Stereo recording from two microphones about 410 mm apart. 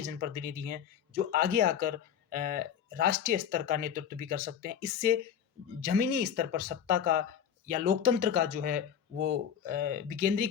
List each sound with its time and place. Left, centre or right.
0.0 s speech: right